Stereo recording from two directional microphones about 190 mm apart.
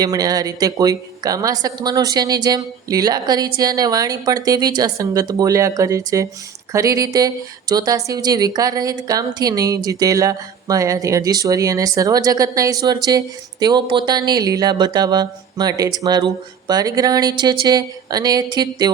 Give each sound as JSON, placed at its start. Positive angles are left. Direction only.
{"t": 0.0, "sound": "a woman's voice", "side_deg": -20}